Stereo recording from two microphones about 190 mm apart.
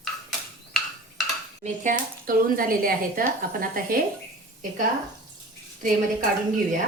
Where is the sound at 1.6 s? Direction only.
45° right (ahead or behind).